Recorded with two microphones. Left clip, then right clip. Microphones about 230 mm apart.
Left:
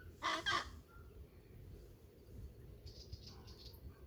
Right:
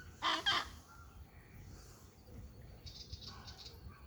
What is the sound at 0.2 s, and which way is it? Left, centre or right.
Chicken, left.